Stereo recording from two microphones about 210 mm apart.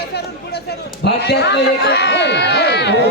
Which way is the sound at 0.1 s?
50° left (ahead or behind).